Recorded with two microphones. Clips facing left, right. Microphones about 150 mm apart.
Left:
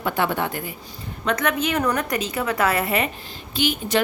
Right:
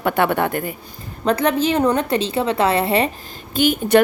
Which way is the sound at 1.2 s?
35° right (ahead or behind).